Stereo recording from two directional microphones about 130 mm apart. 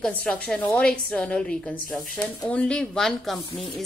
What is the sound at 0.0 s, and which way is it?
A woman's voice, 5° left (ahead or behind).